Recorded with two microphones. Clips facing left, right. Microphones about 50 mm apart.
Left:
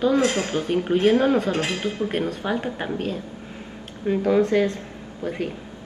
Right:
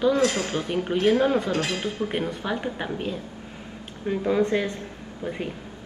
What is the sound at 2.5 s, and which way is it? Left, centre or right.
Speech, centre.